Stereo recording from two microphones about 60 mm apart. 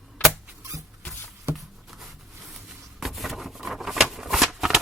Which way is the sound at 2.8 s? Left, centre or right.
Centre.